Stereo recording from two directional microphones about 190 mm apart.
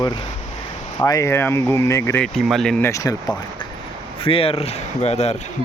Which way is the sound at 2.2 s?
Centre (ahead or behind).